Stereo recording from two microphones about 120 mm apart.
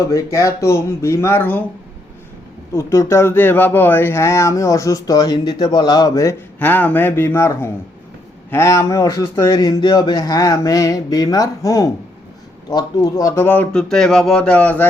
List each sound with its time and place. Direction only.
0.1 s speech: 25° left (ahead or behind)
2.7 s speech: 25° left (ahead or behind)
6.6 s a man's voice: 15° left (ahead or behind)
13.9 s a man's voice: 5° left (ahead or behind)